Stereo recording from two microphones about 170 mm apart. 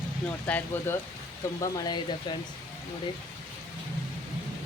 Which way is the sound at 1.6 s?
25° left (ahead or behind).